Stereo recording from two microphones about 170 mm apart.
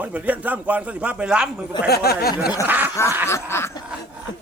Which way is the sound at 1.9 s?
65° left (ahead or behind).